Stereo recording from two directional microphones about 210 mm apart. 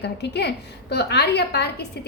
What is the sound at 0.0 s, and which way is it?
A woman's voice, 50° left (ahead or behind).